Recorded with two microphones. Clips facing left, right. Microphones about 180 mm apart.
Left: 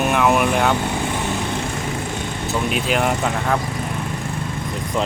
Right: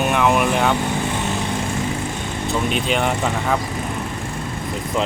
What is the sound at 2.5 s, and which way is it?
Speech, 5° left (ahead or behind).